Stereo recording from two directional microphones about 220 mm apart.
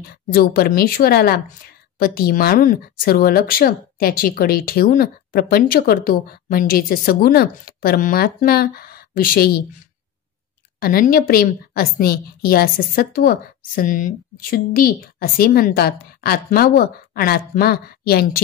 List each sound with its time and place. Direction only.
0.3 s speech: 45° left (ahead or behind)
10.8 s speech: 40° left (ahead or behind)